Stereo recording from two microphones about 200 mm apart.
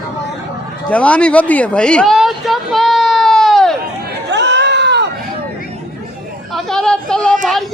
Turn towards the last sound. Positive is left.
turn(degrees=5)  # may be behind; listen again after turning